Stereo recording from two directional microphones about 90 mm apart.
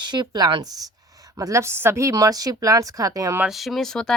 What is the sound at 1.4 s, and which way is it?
Speech, 35° right (ahead or behind).